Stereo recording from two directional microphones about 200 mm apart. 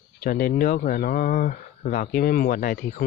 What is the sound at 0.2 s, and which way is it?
Speech, 50° left (ahead or behind).